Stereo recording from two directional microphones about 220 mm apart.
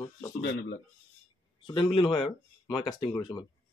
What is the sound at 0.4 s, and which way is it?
Speech, 50° left (ahead or behind).